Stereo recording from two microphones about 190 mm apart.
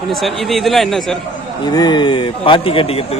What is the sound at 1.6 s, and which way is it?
A man's voice, 20° left (ahead or behind).